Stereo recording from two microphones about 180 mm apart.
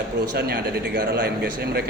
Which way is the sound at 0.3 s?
65° right (ahead or behind).